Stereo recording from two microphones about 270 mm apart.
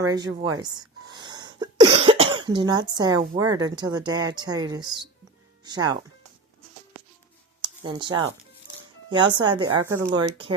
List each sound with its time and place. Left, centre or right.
0.1 s a woman's voice: centre
7.8 s a woman's voice: centre